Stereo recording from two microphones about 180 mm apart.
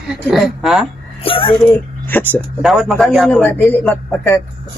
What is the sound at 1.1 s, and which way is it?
Speech, 30° left (ahead or behind).